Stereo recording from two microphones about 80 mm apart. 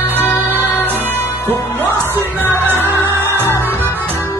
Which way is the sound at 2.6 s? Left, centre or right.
Right.